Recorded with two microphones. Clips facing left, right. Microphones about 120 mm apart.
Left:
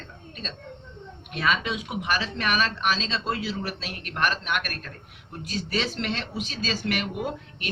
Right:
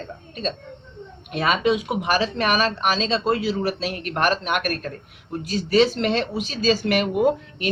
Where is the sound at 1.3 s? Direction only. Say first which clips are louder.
Right 3 dB; 55° right (ahead or behind).